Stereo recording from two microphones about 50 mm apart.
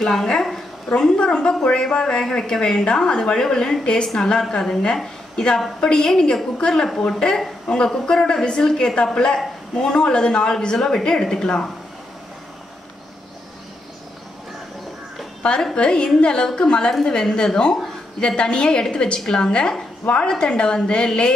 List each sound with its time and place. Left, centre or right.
0.0 s a woman's voice: centre
15.4 s speech: centre